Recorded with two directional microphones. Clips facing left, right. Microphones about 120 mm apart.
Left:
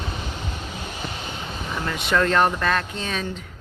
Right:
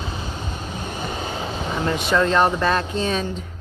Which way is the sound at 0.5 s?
40° right (ahead or behind).